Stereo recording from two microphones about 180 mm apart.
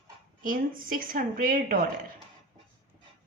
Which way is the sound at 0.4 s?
50° right (ahead or behind).